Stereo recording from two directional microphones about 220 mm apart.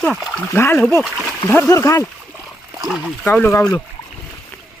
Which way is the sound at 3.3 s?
10° left (ahead or behind).